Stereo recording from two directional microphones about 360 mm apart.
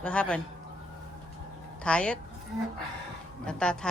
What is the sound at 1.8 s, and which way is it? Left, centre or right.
Speech, centre.